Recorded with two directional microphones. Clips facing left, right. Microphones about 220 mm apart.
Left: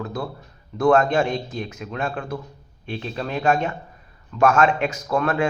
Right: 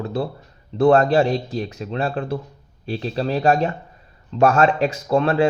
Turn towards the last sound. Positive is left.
turn(degrees=-30)  # may be behind; listen again after turning